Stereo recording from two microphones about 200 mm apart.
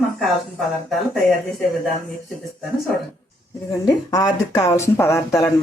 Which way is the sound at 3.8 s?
20° left (ahead or behind).